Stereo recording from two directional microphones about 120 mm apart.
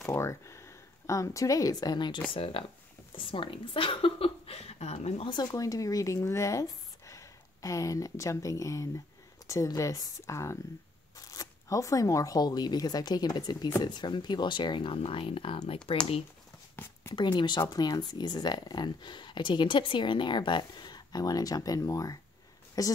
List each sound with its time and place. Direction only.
0.1 s speech: 25° left (ahead or behind); by 5.2 s 60° left (ahead or behind)
5.2 s speech: 35° left (ahead or behind)
16.7 s a sound: 20° left (ahead or behind)
17.1 s speech: 40° left (ahead or behind)